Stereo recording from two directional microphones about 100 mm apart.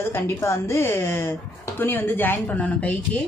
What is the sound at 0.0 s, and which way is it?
A woman's voice, 25° left (ahead or behind).